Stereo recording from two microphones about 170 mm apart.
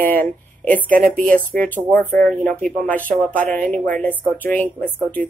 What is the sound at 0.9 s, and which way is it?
Speech, 55° right (ahead or behind).